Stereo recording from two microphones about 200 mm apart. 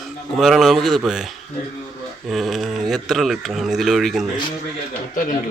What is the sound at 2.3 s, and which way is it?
Speech, centre (ahead or behind).